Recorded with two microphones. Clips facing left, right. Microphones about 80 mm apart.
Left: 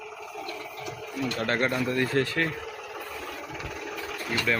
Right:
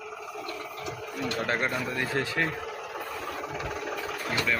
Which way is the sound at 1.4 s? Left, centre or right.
Centre.